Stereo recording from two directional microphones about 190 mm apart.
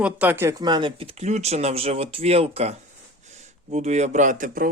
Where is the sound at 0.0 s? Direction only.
10° right (ahead or behind).